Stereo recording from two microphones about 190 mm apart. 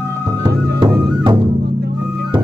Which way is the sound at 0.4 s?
20° right (ahead or behind).